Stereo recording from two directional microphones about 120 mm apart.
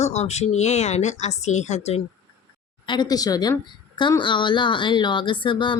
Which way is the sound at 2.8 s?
40° left (ahead or behind).